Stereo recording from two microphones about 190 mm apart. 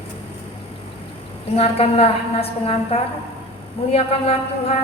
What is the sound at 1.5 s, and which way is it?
A woman's voice, 30° left (ahead or behind).